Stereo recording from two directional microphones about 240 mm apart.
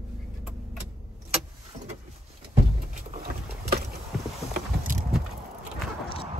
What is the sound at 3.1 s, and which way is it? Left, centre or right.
Vehicle, right.